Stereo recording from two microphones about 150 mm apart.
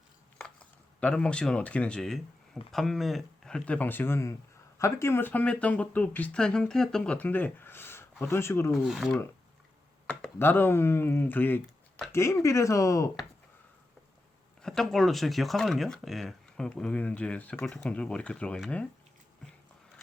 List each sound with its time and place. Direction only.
0.3 s speech: 5° left (ahead or behind)
8.7 s speech: centre (ahead or behind)
10.3 s speech: 15° left (ahead or behind)
14.6 s speech: centre (ahead or behind)